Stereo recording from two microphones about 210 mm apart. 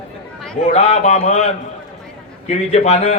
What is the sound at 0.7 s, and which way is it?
Speech, 30° left (ahead or behind).